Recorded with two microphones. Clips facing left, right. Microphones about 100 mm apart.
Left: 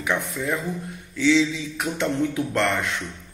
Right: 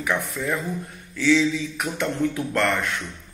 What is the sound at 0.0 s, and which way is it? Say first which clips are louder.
A man's voice: even; 20° left (ahead or behind).